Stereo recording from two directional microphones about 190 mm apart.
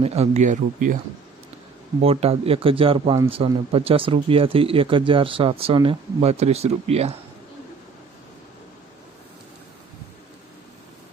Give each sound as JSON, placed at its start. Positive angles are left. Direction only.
{"t": 0.0, "sound": "speech", "side_deg": -35}
{"t": 2.0, "sound": "speech", "side_deg": -30}